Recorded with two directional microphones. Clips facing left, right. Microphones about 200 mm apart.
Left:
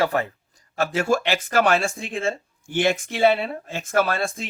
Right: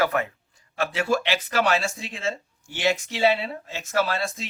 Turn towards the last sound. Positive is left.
turn(degrees=50)  # may be behind; listen again after turning